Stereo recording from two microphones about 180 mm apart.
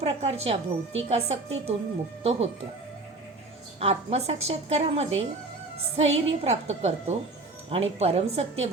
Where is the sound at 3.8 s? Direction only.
35° right (ahead or behind).